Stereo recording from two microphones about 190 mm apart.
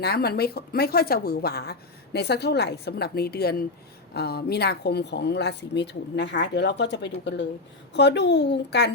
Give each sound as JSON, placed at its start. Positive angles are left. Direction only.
{"t": 0.0, "sound": "speech", "side_deg": 55}